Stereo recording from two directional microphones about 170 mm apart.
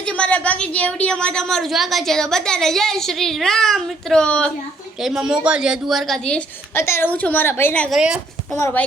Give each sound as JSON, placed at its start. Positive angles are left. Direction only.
{"t": 0.0, "sound": "a woman's voice", "side_deg": 5}
{"t": 7.9, "sound": "a woman's voice", "side_deg": -5}
{"t": 8.5, "sound": "a child's voice", "side_deg": 15}